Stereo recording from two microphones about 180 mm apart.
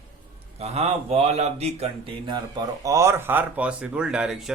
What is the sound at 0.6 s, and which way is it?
Speech, 35° right (ahead or behind).